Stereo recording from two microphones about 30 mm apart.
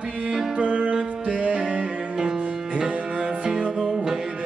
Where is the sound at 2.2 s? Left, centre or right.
Right.